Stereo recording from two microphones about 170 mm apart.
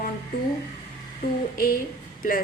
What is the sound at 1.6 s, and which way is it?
Speech, 55° left (ahead or behind).